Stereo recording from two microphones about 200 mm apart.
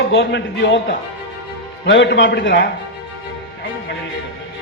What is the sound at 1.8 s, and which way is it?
Speech, 60° left (ahead or behind).